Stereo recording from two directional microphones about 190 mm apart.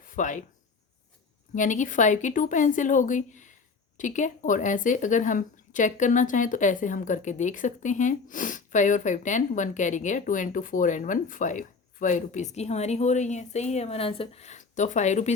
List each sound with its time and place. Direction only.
0.0 s speech: 45° left (ahead or behind)
1.5 s speech: 40° left (ahead or behind)